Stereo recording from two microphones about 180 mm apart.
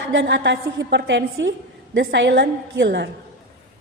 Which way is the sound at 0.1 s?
85° right.